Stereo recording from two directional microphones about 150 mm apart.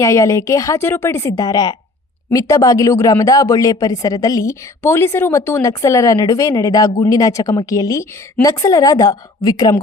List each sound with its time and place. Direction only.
0.0 s speech: 20° left (ahead or behind)